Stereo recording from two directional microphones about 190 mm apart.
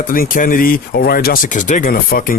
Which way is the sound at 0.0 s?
45° left (ahead or behind).